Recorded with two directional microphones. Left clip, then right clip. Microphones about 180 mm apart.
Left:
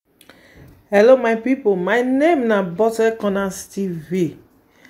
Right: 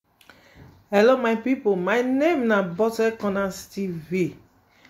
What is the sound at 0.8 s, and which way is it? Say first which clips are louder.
A woman's voice: left 6 dB; 5° left (ahead or behind).